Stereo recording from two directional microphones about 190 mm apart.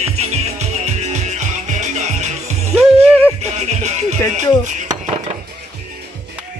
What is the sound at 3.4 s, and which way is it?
Music, 35° right (ahead or behind).